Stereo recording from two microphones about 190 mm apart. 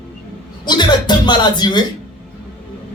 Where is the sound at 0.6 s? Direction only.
25° left (ahead or behind).